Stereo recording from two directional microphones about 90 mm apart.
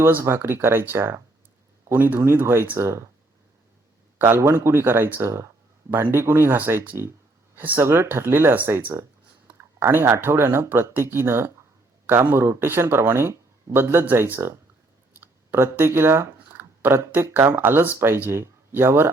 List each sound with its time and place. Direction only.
0.0 s speech: 25° right (ahead or behind)
4.2 s speech: 25° right (ahead or behind)